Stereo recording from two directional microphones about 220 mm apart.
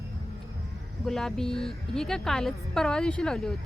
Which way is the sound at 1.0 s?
Centre (ahead or behind).